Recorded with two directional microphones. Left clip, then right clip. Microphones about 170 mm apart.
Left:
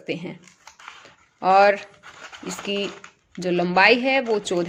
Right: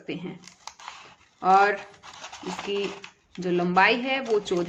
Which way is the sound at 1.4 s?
45° left (ahead or behind).